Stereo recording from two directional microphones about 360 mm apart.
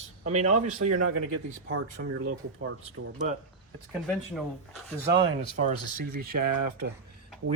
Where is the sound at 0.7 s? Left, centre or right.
Right.